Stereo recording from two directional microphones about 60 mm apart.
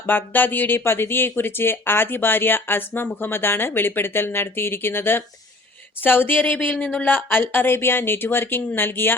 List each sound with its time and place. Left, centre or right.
0.0 s speech: left